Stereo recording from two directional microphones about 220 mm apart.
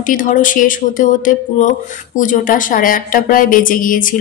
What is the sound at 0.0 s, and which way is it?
A woman's voice, 35° left (ahead or behind).